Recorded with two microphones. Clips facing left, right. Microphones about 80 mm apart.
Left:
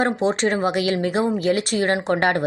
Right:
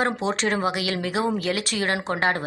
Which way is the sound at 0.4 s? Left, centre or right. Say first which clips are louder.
Left 4 dB; left.